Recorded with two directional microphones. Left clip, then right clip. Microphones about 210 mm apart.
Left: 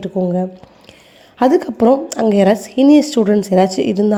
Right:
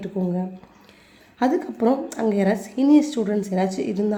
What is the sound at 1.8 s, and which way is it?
Speech, 35° left (ahead or behind).